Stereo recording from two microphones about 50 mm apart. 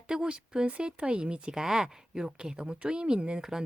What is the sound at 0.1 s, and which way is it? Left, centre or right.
Speech, centre.